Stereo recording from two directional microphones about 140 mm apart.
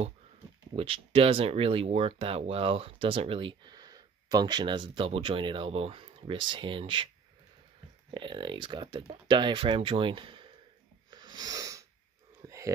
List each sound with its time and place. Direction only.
0.7 s speech: 40° right (ahead or behind)
8.1 s speech: 35° right (ahead or behind)
11.1 s a sound: 30° right (ahead or behind)